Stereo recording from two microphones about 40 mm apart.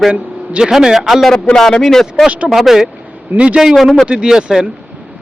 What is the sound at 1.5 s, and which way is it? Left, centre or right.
Speech, centre.